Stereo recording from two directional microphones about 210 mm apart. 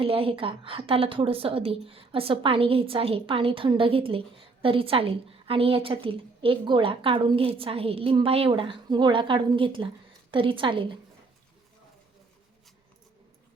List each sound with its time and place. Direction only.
0.0 s a woman's voice: 25° right (ahead or behind)